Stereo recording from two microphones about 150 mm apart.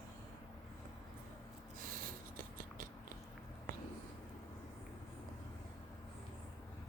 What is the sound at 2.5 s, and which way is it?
Biting, 65° right (ahead or behind).